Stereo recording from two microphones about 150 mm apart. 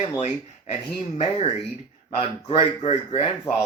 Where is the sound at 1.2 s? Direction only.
45° left (ahead or behind).